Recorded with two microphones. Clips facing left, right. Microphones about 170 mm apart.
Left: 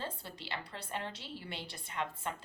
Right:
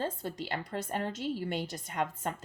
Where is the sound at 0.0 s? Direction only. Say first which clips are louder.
Right 8 dB; 45° right (ahead or behind).